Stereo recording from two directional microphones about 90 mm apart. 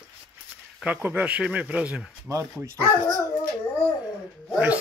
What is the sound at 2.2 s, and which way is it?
Speech, 35° right (ahead or behind).